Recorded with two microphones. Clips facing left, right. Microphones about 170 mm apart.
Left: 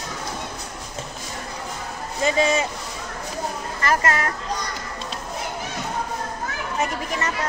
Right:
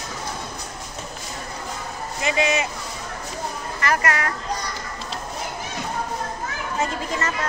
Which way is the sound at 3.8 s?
25° left (ahead or behind).